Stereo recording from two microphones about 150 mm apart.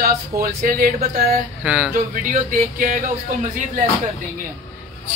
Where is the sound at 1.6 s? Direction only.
10° right (ahead or behind).